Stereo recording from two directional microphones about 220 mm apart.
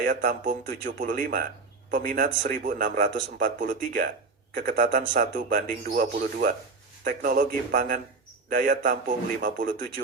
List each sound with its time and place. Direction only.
0.0 s a man's voice: 40° right (ahead or behind)